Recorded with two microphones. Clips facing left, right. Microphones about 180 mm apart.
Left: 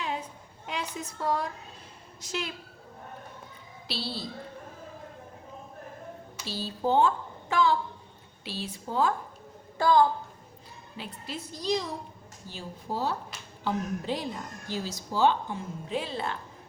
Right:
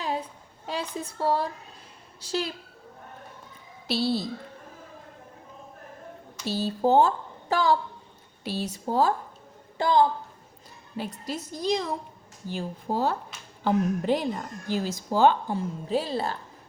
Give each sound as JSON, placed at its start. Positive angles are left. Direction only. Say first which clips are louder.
{"t": 0.0, "sound": "a sound", "louder": "right 3 dB", "side_deg": -35}
{"t": 0.7, "sound": "a woman's voice", "louder": "right 3 dB", "side_deg": -30}
{"t": 3.8, "sound": "a woman's voice", "louder": "right 10 dB", "side_deg": -45}
{"t": 6.4, "sound": "a woman's voice", "louder": "right 6 dB", "side_deg": -50}
{"t": 9.7, "sound": "a woman's voice", "louder": "even", "side_deg": -20}
{"t": 10.9, "sound": "a woman's voice", "louder": "right 6 dB", "side_deg": -45}
{"t": 15.5, "sound": "a woman's voice", "louder": "right 6 dB", "side_deg": -35}